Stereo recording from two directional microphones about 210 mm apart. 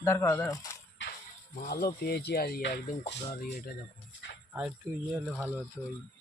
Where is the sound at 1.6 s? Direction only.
45° left (ahead or behind).